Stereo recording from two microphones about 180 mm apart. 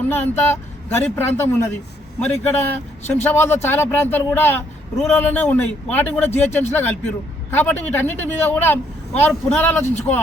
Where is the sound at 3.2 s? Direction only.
10° left (ahead or behind).